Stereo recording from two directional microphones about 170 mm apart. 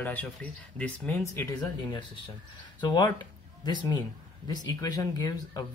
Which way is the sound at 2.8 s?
25° left (ahead or behind).